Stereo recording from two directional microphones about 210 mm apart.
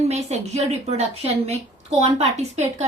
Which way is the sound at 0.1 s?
30° right (ahead or behind).